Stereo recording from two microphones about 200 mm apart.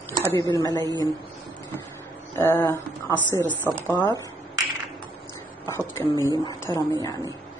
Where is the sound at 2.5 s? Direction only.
15° left (ahead or behind).